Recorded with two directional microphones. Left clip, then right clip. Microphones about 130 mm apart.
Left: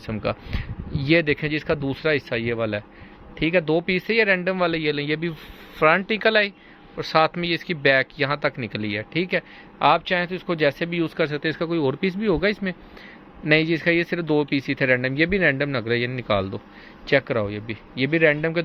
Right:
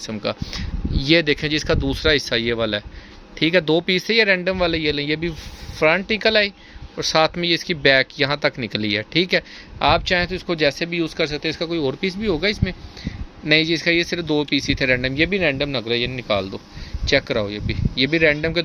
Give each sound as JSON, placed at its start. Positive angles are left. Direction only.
{"t": 0.0, "sound": "speech", "side_deg": -25}
{"t": 6.9, "sound": "speech", "side_deg": -45}
{"t": 17.1, "sound": "speech", "side_deg": -30}